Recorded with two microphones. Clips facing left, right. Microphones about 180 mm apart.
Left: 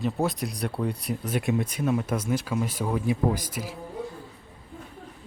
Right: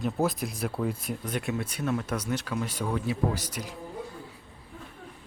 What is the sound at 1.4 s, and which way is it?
Speech, 15° left (ahead or behind).